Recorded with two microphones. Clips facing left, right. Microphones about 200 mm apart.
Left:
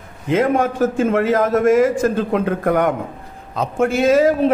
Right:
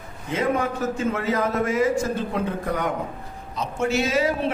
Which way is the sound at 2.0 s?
80° left.